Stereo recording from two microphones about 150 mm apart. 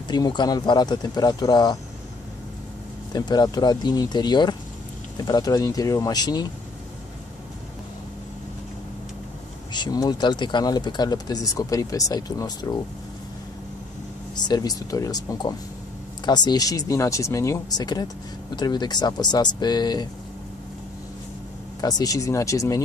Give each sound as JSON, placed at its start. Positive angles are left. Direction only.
{"t": 0.1, "sound": "speech", "side_deg": 30}
{"t": 3.1, "sound": "speech", "side_deg": 25}
{"t": 9.7, "sound": "speech", "side_deg": 25}
{"t": 14.3, "sound": "speech", "side_deg": 25}
{"t": 21.8, "sound": "speech", "side_deg": 25}